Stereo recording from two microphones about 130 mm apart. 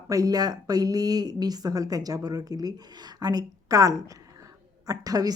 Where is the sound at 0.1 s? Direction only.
30° right (ahead or behind).